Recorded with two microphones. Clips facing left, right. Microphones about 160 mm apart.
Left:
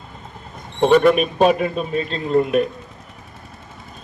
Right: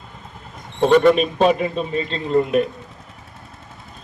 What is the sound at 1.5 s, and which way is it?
Speech, 25° right (ahead or behind).